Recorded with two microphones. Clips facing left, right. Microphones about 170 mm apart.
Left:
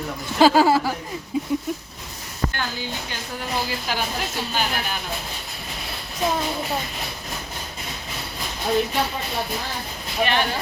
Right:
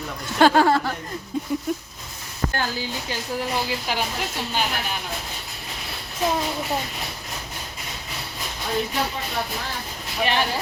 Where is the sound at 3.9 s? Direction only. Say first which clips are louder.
Even; 25° right (ahead or behind).